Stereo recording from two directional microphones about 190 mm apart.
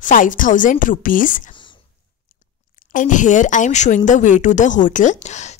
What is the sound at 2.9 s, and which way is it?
Speech, 40° left (ahead or behind).